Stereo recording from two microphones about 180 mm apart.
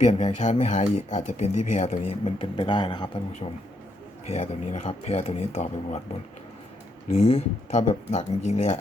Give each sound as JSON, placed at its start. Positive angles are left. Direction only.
{"t": 0.0, "sound": "speech", "side_deg": 40}
{"t": 4.3, "sound": "speech", "side_deg": 40}
{"t": 7.1, "sound": "speech", "side_deg": 35}